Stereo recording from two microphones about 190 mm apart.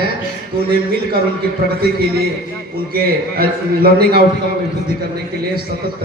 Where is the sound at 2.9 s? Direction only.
50° right (ahead or behind).